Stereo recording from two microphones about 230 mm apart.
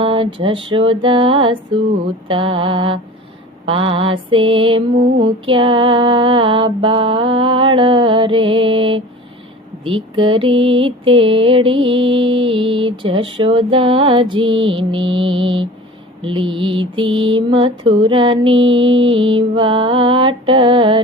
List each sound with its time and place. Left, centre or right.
0.0 s mantra: right